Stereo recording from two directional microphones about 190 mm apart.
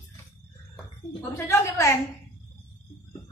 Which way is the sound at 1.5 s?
15° left (ahead or behind).